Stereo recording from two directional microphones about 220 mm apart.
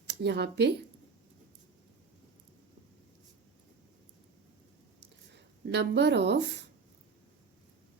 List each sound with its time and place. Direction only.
0.2 s speech: 50° right (ahead or behind)
5.3 s speech: 50° right (ahead or behind)